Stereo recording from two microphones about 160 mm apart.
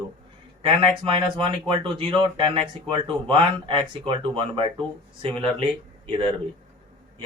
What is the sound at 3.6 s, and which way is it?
Speech, 30° right (ahead or behind).